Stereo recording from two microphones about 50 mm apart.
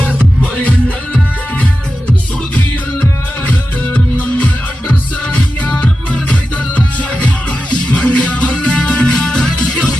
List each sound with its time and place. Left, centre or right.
0.6 s music: left